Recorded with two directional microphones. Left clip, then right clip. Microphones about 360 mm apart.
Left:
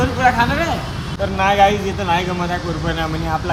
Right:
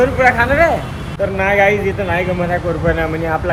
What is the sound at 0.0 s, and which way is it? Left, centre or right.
Speech, centre.